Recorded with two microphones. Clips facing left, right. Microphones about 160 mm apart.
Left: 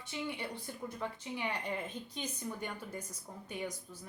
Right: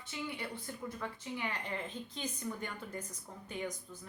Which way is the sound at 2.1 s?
15° left (ahead or behind).